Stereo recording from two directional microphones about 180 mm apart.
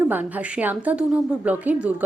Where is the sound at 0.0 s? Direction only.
10° right (ahead or behind).